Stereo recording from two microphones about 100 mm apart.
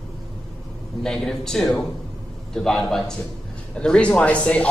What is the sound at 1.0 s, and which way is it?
A man's voice, 5° left (ahead or behind).